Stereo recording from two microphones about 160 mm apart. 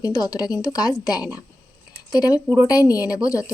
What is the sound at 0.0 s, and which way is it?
Speech, 25° left (ahead or behind).